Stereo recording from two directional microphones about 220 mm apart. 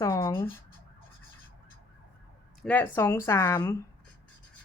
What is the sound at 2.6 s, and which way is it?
Speech, 5° left (ahead or behind).